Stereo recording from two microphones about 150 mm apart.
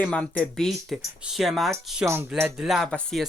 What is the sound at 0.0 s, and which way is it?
Speech, 5° left (ahead or behind).